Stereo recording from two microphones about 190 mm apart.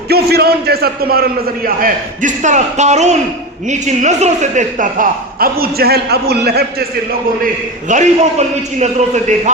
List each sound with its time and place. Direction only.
0.1 s a man's voice: 55° right (ahead or behind)
7.9 s a man's voice: 40° right (ahead or behind)